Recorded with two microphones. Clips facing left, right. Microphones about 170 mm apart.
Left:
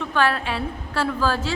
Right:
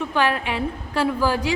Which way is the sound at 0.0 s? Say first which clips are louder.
Even; 15° right (ahead or behind).